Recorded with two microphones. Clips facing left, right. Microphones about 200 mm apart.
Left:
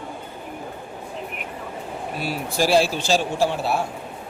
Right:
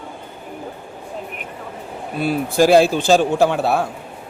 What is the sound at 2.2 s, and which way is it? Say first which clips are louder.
A man's voice: right 8 dB; 55° right (ahead or behind).